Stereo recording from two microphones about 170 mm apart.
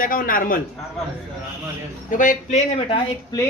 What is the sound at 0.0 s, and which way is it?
Speech, 55° left (ahead or behind).